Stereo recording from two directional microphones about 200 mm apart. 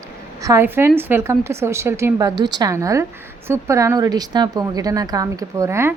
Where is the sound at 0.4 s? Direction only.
15° right (ahead or behind).